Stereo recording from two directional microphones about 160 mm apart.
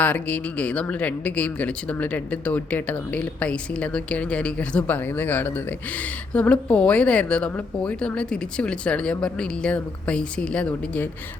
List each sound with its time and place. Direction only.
0.0 s speech: 10° left (ahead or behind)